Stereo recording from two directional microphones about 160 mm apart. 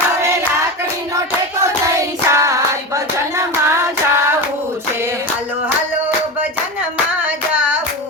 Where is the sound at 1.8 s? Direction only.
20° right (ahead or behind).